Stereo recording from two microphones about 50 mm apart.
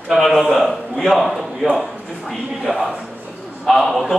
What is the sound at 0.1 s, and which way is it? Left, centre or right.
A man's voice, centre.